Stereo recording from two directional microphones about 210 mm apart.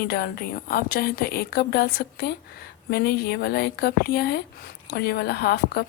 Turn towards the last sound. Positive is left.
turn(degrees=50)  # may be behind; listen again after turning